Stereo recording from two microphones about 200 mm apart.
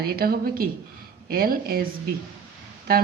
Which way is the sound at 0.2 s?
50° right (ahead or behind).